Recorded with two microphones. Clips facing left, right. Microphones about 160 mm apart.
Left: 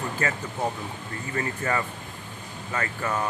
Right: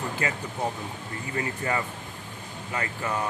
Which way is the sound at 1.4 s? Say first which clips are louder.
Left 1 dB; 20° right (ahead or behind).